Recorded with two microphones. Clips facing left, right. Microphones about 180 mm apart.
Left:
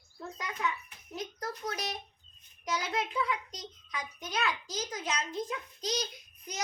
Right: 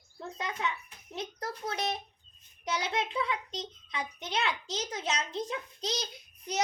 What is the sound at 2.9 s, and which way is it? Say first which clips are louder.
A child's voice: left 1 dB; 25° right (ahead or behind).